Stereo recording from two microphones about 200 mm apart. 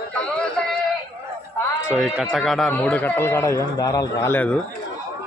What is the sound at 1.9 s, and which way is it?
A man's voice, 5° right (ahead or behind).